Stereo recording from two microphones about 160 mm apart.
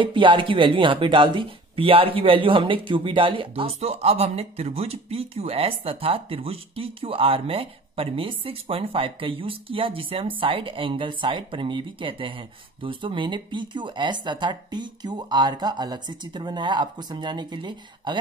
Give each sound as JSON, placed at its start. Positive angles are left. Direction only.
{"t": 0.0, "sound": "speech", "side_deg": -30}